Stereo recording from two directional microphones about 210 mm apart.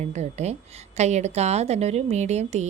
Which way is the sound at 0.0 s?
30° right (ahead or behind).